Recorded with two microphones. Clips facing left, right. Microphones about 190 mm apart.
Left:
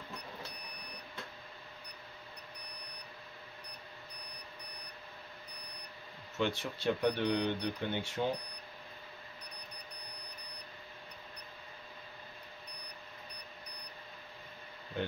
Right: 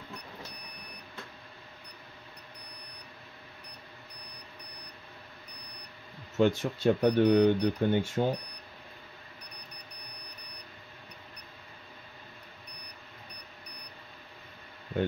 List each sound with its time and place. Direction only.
6.3 s speech: 45° right (ahead or behind)